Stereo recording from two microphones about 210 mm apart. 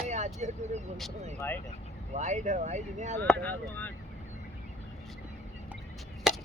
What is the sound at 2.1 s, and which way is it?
Speech, 35° right (ahead or behind).